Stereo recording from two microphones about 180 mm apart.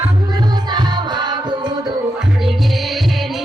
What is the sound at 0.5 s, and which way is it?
Music, 25° right (ahead or behind).